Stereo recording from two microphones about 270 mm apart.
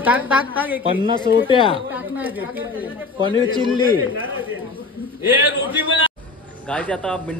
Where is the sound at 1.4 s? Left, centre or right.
Centre.